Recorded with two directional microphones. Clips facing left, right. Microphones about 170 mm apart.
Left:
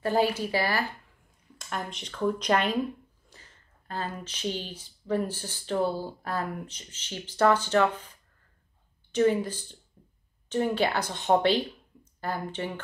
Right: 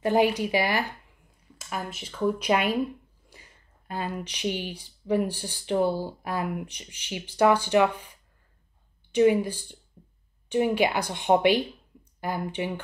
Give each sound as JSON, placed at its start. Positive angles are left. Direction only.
{"t": 0.0, "sound": "speech", "side_deg": -15}
{"t": 1.6, "sound": "speech", "side_deg": -5}
{"t": 9.1, "sound": "speech", "side_deg": -10}